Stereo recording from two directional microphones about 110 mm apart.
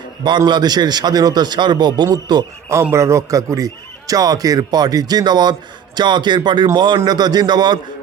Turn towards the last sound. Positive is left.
turn(degrees=-40)  # may be behind; listen again after turning